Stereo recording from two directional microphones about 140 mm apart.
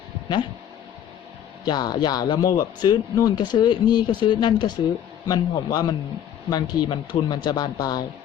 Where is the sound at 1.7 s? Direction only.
30° left (ahead or behind).